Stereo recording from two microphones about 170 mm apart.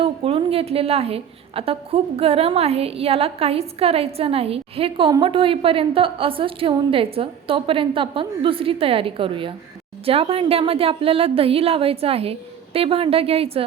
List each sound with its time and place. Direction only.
0.0 s a woman's voice: 35° right (ahead or behind)